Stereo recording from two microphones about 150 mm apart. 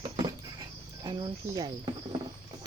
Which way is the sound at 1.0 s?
25° right (ahead or behind).